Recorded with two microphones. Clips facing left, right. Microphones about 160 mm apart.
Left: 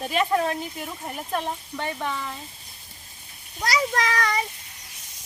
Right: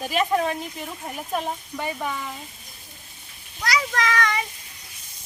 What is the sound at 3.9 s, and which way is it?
Speech, 35° left (ahead or behind).